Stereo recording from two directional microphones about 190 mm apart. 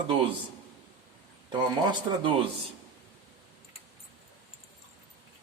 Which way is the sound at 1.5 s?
25° right (ahead or behind).